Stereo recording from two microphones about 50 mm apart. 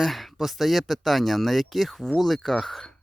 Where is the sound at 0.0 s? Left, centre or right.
Centre.